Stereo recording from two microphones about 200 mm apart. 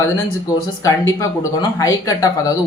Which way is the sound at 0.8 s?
15° left (ahead or behind).